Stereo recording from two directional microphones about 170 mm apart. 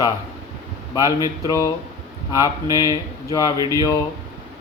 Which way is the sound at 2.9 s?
20° left (ahead or behind).